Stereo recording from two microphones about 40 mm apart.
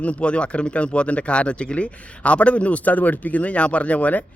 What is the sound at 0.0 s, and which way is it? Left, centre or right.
Speech, left.